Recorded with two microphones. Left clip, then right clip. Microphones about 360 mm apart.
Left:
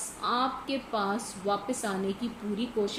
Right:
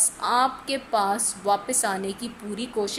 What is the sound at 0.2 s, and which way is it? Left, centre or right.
A woman's voice, right.